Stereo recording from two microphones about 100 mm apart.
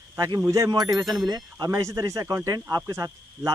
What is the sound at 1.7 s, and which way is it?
Speech, 30° right (ahead or behind).